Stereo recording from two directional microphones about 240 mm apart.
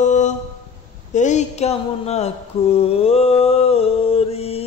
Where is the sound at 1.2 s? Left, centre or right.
Left.